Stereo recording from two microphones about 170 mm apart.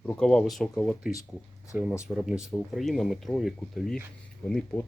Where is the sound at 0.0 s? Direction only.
5° left (ahead or behind).